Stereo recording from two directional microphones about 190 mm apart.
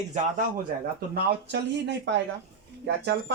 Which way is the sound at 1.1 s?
60° right (ahead or behind).